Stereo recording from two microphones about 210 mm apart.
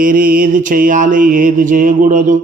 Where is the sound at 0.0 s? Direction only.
40° right (ahead or behind).